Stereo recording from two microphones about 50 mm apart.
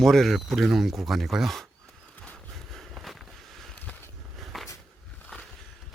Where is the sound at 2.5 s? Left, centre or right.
Centre.